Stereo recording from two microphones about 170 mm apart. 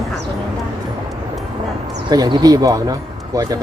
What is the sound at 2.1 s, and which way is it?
Speech, 25° right (ahead or behind).